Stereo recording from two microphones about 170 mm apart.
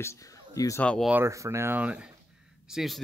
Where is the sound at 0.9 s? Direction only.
Centre (ahead or behind).